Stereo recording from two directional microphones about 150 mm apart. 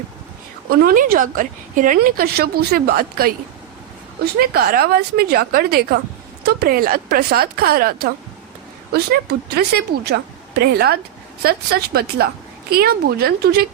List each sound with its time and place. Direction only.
0.7 s a woman's voice: 80° right
9.5 s a woman's voice: 90° right